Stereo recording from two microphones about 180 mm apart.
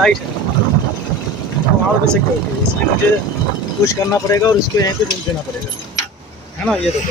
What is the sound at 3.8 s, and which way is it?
Speech, 20° left (ahead or behind).